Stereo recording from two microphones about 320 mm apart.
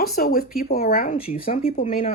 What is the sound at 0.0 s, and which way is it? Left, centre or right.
Speech, left.